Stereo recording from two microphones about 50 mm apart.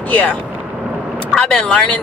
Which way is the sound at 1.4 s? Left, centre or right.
Centre.